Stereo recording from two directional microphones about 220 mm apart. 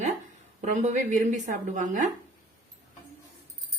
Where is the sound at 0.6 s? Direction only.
35° right (ahead or behind).